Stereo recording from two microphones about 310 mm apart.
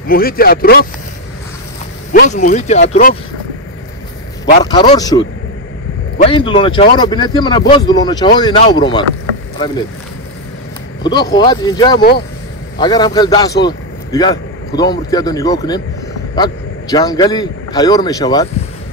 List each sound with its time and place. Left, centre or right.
0.1 s speech: left
2.1 s speech: left
4.6 s speech: centre
11.1 s a man's voice: centre